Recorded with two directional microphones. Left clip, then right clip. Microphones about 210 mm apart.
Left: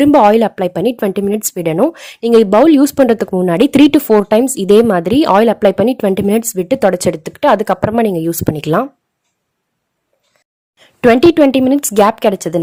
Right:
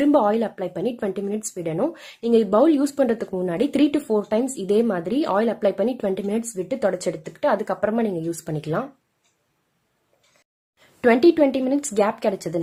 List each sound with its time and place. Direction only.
0.0 s speech: 40° left (ahead or behind)
10.8 s speech: 35° left (ahead or behind)